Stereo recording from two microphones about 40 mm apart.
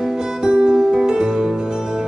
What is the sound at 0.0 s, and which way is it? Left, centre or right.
Music, centre.